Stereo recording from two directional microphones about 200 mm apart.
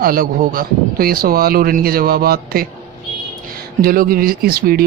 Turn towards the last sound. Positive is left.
turn(degrees=-50)  # may be behind; listen again after turning